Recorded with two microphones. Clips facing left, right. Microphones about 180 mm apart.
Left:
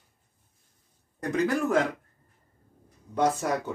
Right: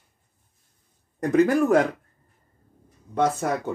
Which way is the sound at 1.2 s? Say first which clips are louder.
Right 7 dB; 50° right (ahead or behind).